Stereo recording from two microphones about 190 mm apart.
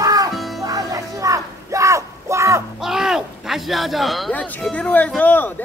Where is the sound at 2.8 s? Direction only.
Centre (ahead or behind).